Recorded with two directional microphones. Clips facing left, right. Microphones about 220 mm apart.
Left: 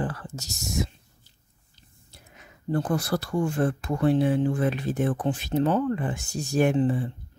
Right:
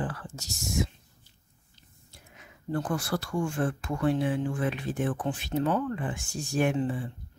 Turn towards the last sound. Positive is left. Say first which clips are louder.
# left 5 dB
turn(degrees=40)  # may be behind; listen again after turning